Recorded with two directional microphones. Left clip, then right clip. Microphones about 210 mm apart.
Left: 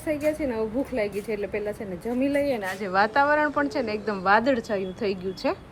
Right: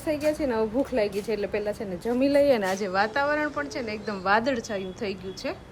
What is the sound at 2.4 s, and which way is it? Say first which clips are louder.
Speech: right 5 dB; 30° right (ahead or behind).